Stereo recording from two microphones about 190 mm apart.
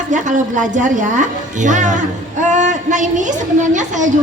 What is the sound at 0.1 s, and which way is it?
A woman's voice, 40° right (ahead or behind).